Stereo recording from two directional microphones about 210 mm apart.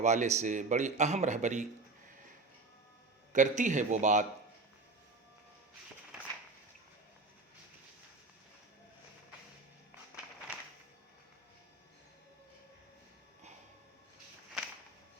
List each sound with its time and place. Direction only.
0.0 s a man's voice: 35° right (ahead or behind)
3.3 s a man's voice: 35° right (ahead or behind)
6.1 s a sound: 5° right (ahead or behind)